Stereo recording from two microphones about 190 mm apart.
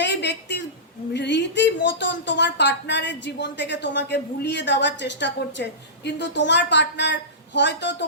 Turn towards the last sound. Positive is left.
turn(degrees=65)  # may be behind; listen again after turning